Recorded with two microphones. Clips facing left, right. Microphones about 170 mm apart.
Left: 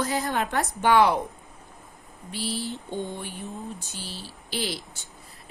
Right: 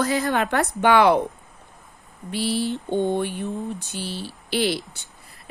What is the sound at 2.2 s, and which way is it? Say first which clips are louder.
A woman's voice: right 7 dB; 70° right (ahead or behind).